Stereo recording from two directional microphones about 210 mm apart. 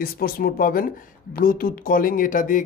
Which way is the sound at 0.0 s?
45° left (ahead or behind).